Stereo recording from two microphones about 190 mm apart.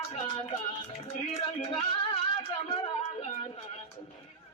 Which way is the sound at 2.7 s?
30° left (ahead or behind).